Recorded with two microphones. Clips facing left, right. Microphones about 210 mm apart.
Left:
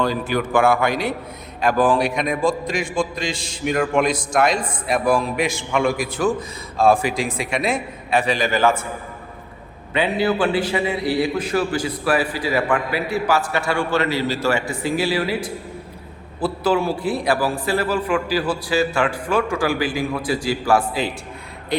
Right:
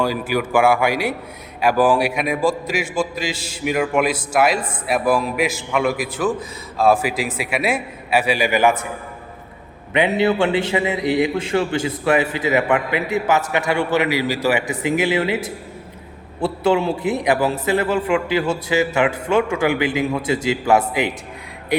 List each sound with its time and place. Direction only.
0.0 s a man's voice: 10° right (ahead or behind)
9.9 s a man's voice: 20° right (ahead or behind)